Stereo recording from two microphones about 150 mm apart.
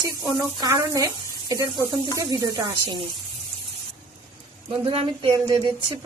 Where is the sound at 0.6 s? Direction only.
25° right (ahead or behind).